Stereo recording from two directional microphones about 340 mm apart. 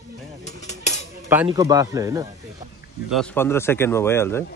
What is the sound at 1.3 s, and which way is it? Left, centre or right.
Speech, centre.